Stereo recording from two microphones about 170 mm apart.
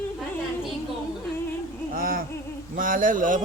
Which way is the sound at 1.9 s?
60° right (ahead or behind).